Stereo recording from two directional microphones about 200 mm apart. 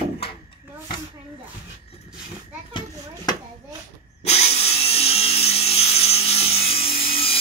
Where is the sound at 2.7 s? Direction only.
25° left (ahead or behind).